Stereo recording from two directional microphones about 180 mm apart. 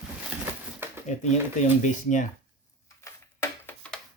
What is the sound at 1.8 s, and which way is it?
Speech, 40° left (ahead or behind).